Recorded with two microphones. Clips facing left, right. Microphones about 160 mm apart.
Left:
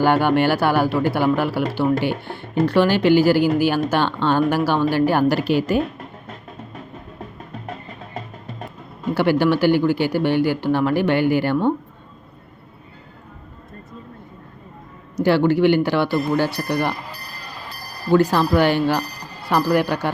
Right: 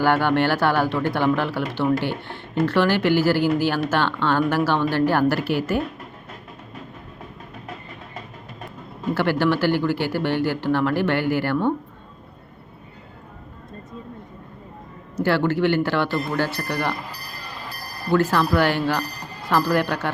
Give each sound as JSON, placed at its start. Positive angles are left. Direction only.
{"t": 0.0, "sound": "speech", "side_deg": 15}
{"t": 9.1, "sound": "speech", "side_deg": 15}
{"t": 15.1, "sound": "speech", "side_deg": 15}
{"t": 18.1, "sound": "speech", "side_deg": 15}